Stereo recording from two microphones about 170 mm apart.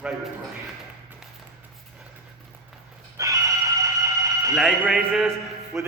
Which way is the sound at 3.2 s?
20° right (ahead or behind).